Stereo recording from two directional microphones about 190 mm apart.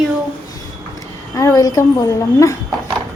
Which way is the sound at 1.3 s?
20° left (ahead or behind).